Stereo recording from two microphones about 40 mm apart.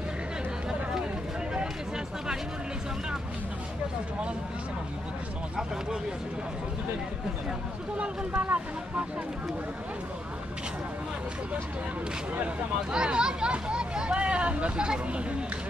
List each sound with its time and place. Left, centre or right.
8.3 s speech: right
12.9 s speech: right